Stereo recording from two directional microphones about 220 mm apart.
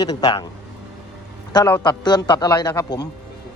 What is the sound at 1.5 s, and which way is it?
A man's voice, 15° left (ahead or behind).